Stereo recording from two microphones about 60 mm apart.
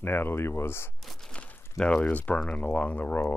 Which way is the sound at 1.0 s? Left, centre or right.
Centre.